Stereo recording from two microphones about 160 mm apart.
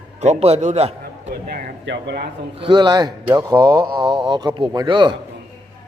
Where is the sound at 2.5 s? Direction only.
30° right (ahead or behind).